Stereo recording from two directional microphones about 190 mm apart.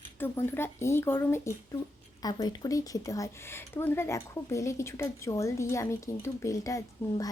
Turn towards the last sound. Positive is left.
turn(degrees=20)  # may be behind; listen again after turning